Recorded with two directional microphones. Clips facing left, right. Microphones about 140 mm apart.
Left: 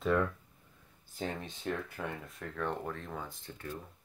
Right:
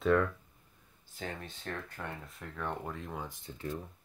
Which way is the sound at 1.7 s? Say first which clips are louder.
Left 5 dB; 15° left (ahead or behind).